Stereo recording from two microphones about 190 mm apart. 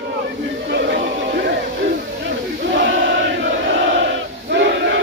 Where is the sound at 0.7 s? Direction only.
65° right (ahead or behind).